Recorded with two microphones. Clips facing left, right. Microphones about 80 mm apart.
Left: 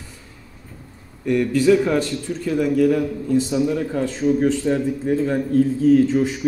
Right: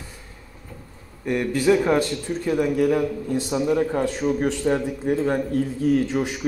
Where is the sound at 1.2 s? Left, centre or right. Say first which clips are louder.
Left 4 dB; right.